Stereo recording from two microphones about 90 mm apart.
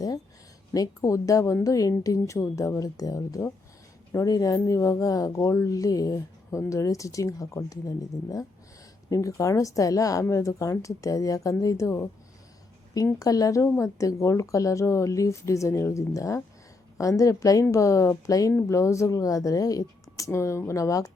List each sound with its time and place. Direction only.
0.7 s speech: 40° left (ahead or behind)
13.1 s speech: 40° left (ahead or behind)